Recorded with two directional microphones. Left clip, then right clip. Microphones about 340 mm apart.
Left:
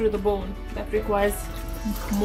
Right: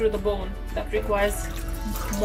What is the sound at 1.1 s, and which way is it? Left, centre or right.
Music, left.